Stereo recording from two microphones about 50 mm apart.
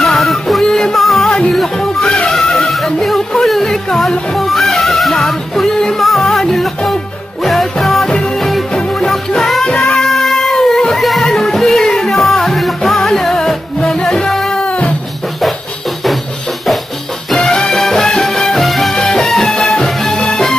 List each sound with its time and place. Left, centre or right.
0.0 s music: centre
10.0 s cat: centre
11.0 s music: centre; by 15.0 s left
17.3 s music: centre
19.5 s music: centre
19.8 s music: centre